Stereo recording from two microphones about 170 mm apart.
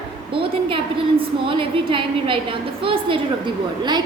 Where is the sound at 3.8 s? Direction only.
25° right (ahead or behind).